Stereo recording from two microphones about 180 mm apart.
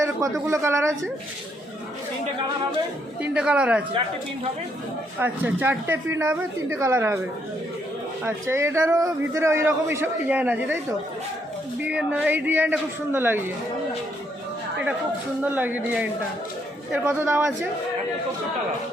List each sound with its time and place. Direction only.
0.0 s a man's voice: 15° right (ahead or behind)
3.2 s speech: 5° right (ahead or behind)
5.2 s a man's voice: 10° right (ahead or behind)
8.2 s a man's voice: 15° right (ahead or behind)
11.8 s a man's voice: 5° right (ahead or behind)
15.4 s a man's voice: 10° right (ahead or behind)